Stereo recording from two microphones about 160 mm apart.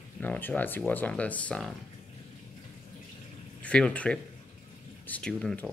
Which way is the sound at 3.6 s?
5° left (ahead or behind).